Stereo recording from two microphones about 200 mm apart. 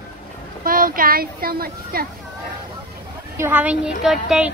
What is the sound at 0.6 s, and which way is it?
Speech, 45° right (ahead or behind).